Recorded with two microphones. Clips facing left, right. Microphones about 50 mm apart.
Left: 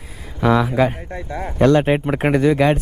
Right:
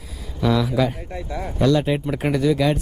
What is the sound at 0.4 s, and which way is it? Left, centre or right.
Speech, left.